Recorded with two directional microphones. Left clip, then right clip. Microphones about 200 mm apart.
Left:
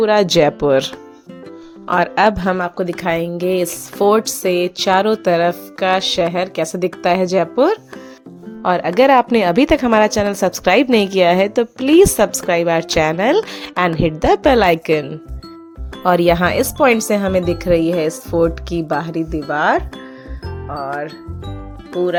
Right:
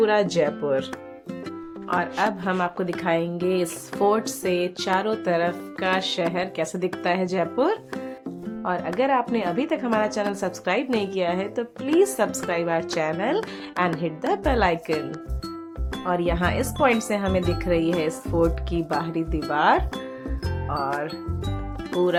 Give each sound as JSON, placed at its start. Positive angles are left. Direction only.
{"t": 0.0, "sound": "a woman's voice", "side_deg": 35}
{"t": 1.9, "sound": "a woman's voice", "side_deg": 45}
{"t": 2.6, "sound": "a woman's voice", "side_deg": 25}
{"t": 16.0, "sound": "a woman's voice", "side_deg": 45}
{"t": 20.7, "sound": "music", "side_deg": 0}